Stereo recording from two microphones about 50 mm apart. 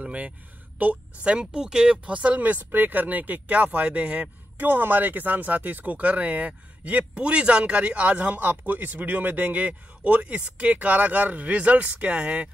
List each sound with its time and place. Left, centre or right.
0.0 s speech: right
1.3 s speech: centre